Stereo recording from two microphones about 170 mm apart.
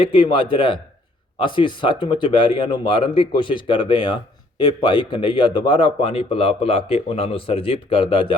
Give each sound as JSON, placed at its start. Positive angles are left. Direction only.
{"t": 0.0, "sound": "speech", "side_deg": 30}